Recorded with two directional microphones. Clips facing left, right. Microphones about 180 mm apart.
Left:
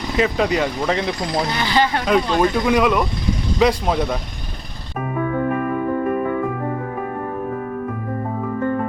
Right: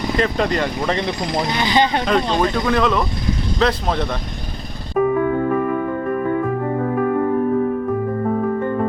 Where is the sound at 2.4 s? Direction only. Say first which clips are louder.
Left 1 dB; 10° left (ahead or behind).